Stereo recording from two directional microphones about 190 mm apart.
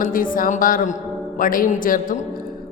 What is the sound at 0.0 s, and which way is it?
A woman's voice, 45° left (ahead or behind).